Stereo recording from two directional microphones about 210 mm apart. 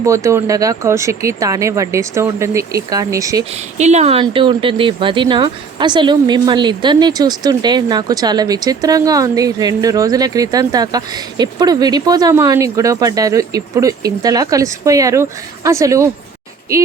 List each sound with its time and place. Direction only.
0.0 s speech: 15° right (ahead or behind)
3.8 s speech: 30° right (ahead or behind); by 16.0 s 15° right (ahead or behind)